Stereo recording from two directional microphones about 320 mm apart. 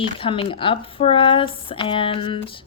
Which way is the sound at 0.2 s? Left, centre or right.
Centre.